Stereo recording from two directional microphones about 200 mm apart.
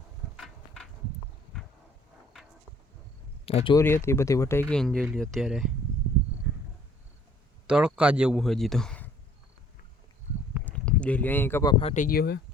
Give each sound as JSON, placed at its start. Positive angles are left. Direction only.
{"t": 0.3, "sound": "a sound", "side_deg": 0}
{"t": 3.4, "sound": "speech", "side_deg": 30}
{"t": 3.8, "sound": "speech", "side_deg": 10}
{"t": 4.7, "sound": "a man's voice", "side_deg": 5}
{"t": 7.7, "sound": "a man's voice", "side_deg": -5}
{"t": 10.7, "sound": "speech", "side_deg": 5}
{"t": 12.0, "sound": "speech", "side_deg": 50}